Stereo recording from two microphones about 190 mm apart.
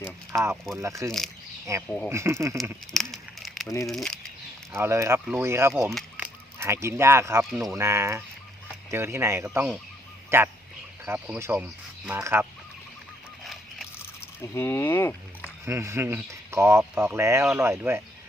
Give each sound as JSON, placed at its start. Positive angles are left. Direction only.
{"t": 0.5, "sound": "speech", "side_deg": 0}
{"t": 0.8, "sound": "speech", "side_deg": -15}
{"t": 2.9, "sound": "a sound", "side_deg": 0}
{"t": 3.8, "sound": "speech", "side_deg": 0}
{"t": 4.7, "sound": "speech", "side_deg": -15}
{"t": 13.4, "sound": "a sound", "side_deg": 0}
{"t": 14.5, "sound": "speech", "side_deg": 15}
{"t": 15.6, "sound": "speech", "side_deg": -15}